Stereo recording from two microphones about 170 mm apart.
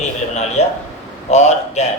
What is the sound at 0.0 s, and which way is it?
A man's voice, 40° left (ahead or behind).